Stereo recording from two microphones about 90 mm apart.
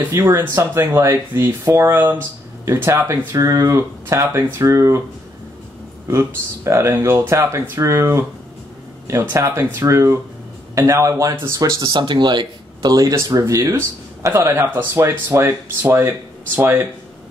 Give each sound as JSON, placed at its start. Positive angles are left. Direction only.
{"t": 0.3, "sound": "speech", "side_deg": -25}
{"t": 6.0, "sound": "speech", "side_deg": -30}
{"t": 9.3, "sound": "speech", "side_deg": -30}
{"t": 11.9, "sound": "speech", "side_deg": -55}
{"t": 13.6, "sound": "speech", "side_deg": -25}